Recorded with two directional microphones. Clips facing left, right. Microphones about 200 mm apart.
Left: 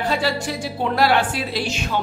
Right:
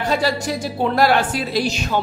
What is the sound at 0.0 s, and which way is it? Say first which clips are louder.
Speech: right 2 dB; 40° right (ahead or behind).